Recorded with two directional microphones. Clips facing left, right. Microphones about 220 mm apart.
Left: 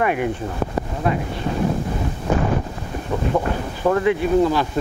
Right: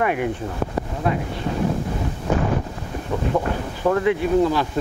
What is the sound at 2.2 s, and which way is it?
Wind noise, 25° left (ahead or behind).